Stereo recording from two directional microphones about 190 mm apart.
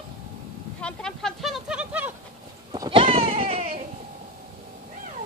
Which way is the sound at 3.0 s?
35° right (ahead or behind).